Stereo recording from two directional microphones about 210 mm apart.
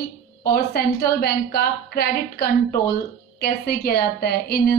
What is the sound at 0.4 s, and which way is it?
A woman's voice, 50° left (ahead or behind).